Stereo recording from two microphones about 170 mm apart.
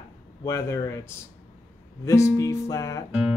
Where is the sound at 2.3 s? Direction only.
20° left (ahead or behind).